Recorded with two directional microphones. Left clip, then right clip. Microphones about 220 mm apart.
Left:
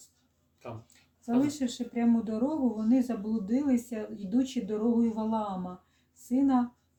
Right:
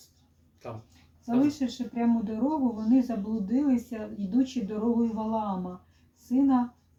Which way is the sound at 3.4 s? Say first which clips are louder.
Right 2 dB; 55° left (ahead or behind).